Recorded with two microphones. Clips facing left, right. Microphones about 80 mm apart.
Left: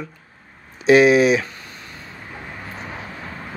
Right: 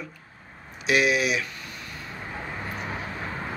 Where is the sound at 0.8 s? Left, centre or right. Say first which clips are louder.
Left 10 dB; left.